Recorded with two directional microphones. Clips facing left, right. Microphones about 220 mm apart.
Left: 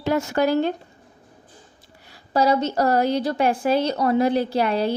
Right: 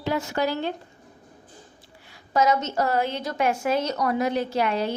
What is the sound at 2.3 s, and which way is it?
A woman's voice, 35° left (ahead or behind).